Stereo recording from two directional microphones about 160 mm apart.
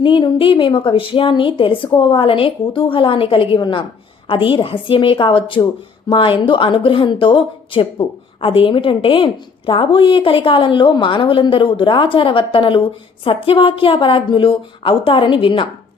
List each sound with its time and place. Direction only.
0.0 s a woman's voice: 30° left (ahead or behind)